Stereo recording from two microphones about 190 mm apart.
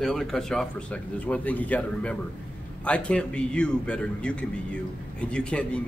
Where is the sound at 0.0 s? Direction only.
Centre (ahead or behind).